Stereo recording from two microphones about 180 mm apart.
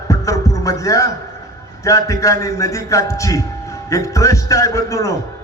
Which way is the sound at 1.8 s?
15° left (ahead or behind).